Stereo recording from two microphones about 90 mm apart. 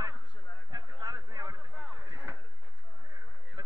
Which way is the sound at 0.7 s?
60° right (ahead or behind).